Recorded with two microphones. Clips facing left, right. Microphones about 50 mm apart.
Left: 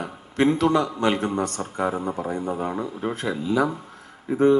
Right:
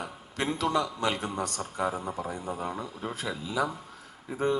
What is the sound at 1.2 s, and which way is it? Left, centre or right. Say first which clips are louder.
A man's voice: left 7 dB; left.